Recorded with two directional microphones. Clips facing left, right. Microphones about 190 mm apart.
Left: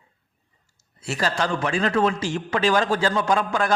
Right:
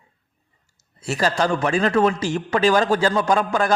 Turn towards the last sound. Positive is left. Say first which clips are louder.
# right 2 dB
turn(degrees=-40)  # may be behind; listen again after turning